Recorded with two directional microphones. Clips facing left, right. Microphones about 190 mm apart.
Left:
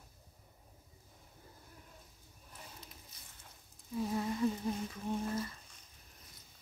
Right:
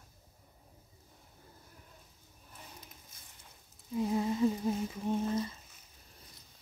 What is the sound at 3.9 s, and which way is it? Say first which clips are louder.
Humming: right 4 dB; 20° right (ahead or behind).